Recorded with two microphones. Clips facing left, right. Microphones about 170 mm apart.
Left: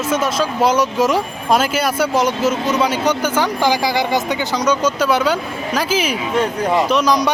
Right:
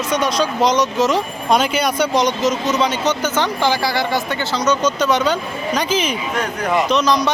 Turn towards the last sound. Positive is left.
turn(degrees=10)  # may be behind; listen again after turning